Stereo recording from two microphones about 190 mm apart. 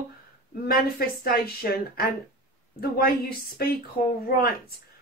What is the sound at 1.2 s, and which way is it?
A woman's voice, 55° left (ahead or behind).